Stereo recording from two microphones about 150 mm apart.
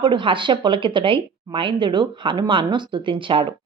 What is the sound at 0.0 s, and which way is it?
Speech, 35° right (ahead or behind).